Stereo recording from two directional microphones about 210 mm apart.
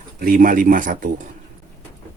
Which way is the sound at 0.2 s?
40° right (ahead or behind).